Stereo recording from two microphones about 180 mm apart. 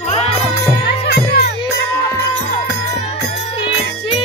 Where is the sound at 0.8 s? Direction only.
65° left (ahead or behind).